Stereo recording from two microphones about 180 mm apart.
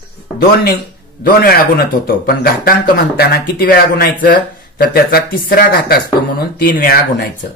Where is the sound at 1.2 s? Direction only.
55° left (ahead or behind).